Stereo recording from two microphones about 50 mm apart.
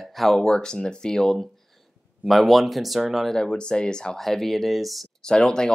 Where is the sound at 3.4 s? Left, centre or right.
Centre.